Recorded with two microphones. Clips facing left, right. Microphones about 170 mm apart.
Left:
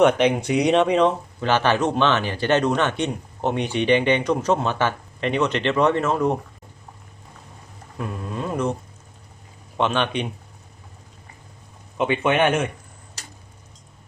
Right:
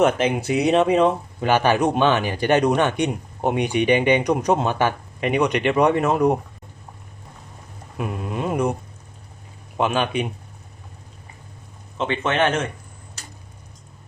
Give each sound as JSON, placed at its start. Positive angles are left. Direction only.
{"t": 0.0, "sound": "speech", "side_deg": 0}
{"t": 7.9, "sound": "speech", "side_deg": -15}
{"t": 9.7, "sound": "speech", "side_deg": -5}
{"t": 11.9, "sound": "a man's voice", "side_deg": 10}